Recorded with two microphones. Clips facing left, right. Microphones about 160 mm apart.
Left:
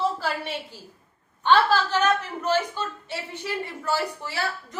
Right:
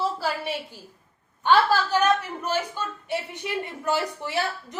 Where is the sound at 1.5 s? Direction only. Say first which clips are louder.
Even; 10° right (ahead or behind).